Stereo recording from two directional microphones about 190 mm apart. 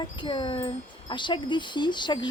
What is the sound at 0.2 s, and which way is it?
Speech, 25° left (ahead or behind).